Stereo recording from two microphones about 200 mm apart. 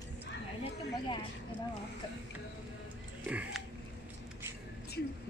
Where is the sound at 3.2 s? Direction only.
5° right (ahead or behind).